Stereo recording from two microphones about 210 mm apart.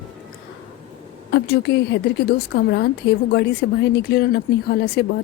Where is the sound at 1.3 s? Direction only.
50° left (ahead or behind).